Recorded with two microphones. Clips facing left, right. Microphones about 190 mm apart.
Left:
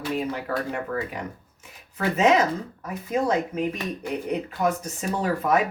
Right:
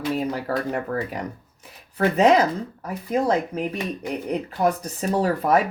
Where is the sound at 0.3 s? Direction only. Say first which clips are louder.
Right 3 dB; 40° right (ahead or behind).